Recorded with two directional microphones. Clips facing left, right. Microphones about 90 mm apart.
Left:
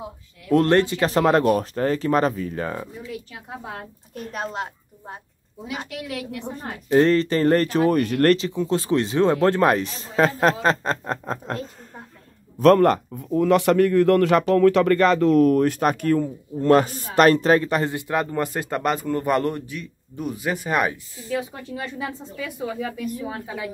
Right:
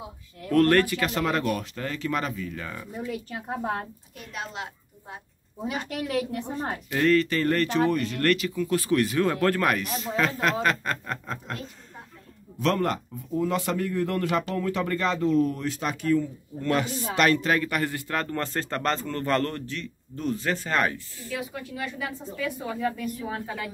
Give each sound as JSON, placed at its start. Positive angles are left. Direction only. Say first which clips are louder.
{"t": 0.5, "sound": "speech", "louder": "left 3 dB", "side_deg": 20}
{"t": 3.0, "sound": "a woman's voice", "louder": "right 2 dB", "side_deg": -45}
{"t": 4.1, "sound": "a woman's voice", "louder": "left 9 dB", "side_deg": 40}
{"t": 5.7, "sound": "a woman's voice", "louder": "right 1 dB", "side_deg": -40}
{"t": 6.9, "sound": "speech", "louder": "left 5 dB", "side_deg": 30}
{"t": 7.9, "sound": "speech", "louder": "left 7 dB", "side_deg": 55}
{"t": 8.3, "sound": "speech", "louder": "left 5 dB", "side_deg": 30}
{"t": 12.5, "sound": "a man's voice", "louder": "left 10 dB", "side_deg": 55}
{"t": 16.6, "sound": "a man's voice", "louder": "left 9 dB", "side_deg": 45}
{"t": 21.4, "sound": "speech", "louder": "left 3 dB", "side_deg": 25}
{"t": 22.8, "sound": "speech", "louder": "left 1 dB", "side_deg": 5}